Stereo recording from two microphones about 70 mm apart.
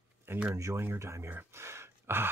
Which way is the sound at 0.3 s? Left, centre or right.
Right.